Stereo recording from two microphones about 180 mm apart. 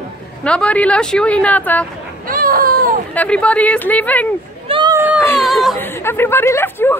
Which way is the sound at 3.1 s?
5° left (ahead or behind).